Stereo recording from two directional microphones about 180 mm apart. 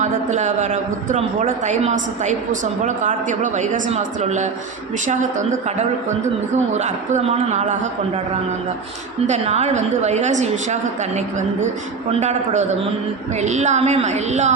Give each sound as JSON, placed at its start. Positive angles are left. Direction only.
{"t": 0.0, "sound": "a man's voice", "side_deg": -40}
{"t": 6.7, "sound": "a man's voice", "side_deg": -40}
{"t": 9.2, "sound": "a man's voice", "side_deg": -40}
{"t": 12.1, "sound": "a man's voice", "side_deg": -40}